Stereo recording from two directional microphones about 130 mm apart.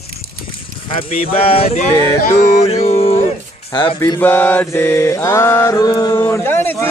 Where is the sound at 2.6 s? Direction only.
55° left (ahead or behind).